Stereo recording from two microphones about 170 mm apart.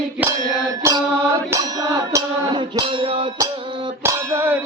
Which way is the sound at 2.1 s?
25° right (ahead or behind).